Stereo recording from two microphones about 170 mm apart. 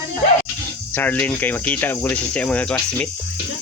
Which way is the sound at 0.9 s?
10° left (ahead or behind).